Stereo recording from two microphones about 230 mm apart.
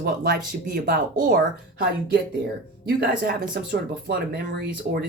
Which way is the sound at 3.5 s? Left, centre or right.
Right.